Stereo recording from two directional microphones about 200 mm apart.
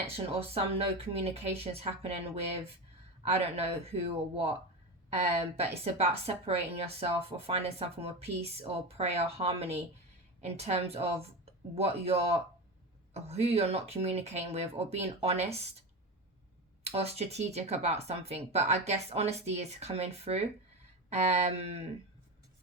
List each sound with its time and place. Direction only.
0.0 s a woman's voice: 30° right (ahead or behind)
16.8 s a woman's voice: 30° right (ahead or behind)